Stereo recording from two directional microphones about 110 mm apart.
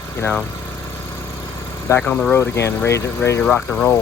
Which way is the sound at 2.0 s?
10° left (ahead or behind).